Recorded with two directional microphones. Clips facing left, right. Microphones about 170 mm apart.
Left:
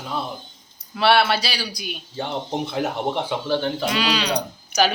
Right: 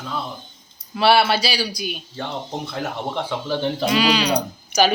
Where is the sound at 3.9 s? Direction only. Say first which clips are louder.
Right 7 dB; 5° right (ahead or behind).